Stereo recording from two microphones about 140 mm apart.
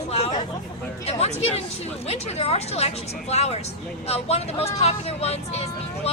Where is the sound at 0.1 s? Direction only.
45° left (ahead or behind).